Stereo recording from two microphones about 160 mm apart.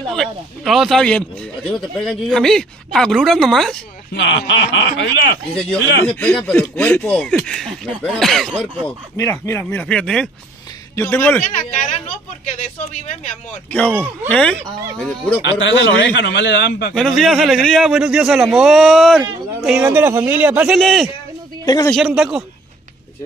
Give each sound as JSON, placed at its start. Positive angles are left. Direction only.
{"t": 0.1, "sound": "a man's voice", "side_deg": 0}
{"t": 4.1, "sound": "speech", "side_deg": 90}
{"t": 6.0, "sound": "a man's voice", "side_deg": 5}
{"t": 9.1, "sound": "speech", "side_deg": 20}
{"t": 12.4, "sound": "speech", "side_deg": 50}
{"t": 13.7, "sound": "a man's voice", "side_deg": 10}
{"t": 15.8, "sound": "speech", "side_deg": 90}
{"t": 16.9, "sound": "a man's voice", "side_deg": 0}
{"t": 21.6, "sound": "speech", "side_deg": 20}
{"t": 21.9, "sound": "a man's voice", "side_deg": -5}